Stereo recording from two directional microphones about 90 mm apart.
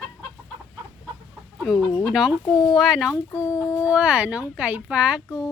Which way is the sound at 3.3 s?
35° left (ahead or behind).